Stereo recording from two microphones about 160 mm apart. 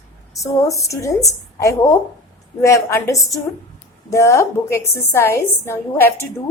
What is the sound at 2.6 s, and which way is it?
A woman's voice, 20° left (ahead or behind).